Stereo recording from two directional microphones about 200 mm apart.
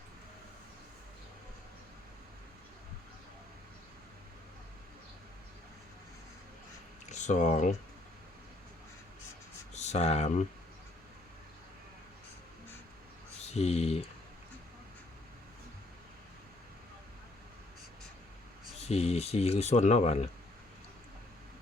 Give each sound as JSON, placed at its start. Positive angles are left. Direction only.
{"t": 7.1, "sound": "speech", "side_deg": 35}
{"t": 9.7, "sound": "speech", "side_deg": 35}
{"t": 13.4, "sound": "speech", "side_deg": 35}
{"t": 18.8, "sound": "speech", "side_deg": 30}